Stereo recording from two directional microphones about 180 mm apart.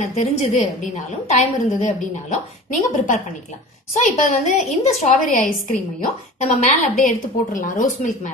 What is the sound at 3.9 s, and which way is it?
A woman's voice, 40° left (ahead or behind).